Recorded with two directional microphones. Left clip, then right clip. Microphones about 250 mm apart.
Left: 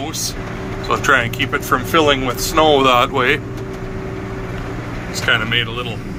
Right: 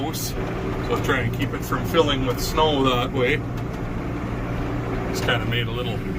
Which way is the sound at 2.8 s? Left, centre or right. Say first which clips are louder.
Left 8 dB; centre.